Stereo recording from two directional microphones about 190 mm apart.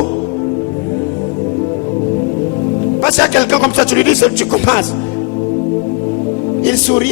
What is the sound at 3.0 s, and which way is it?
Speech, 15° left (ahead or behind).